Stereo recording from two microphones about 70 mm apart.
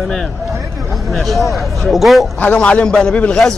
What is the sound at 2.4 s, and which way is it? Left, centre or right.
A man's voice, centre.